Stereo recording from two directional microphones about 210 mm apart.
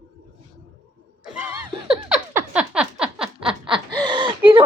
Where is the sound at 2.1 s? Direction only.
5° right (ahead or behind).